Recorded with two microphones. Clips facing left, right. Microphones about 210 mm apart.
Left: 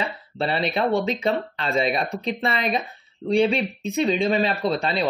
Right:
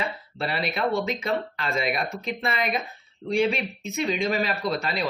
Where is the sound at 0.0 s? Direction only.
30° left (ahead or behind).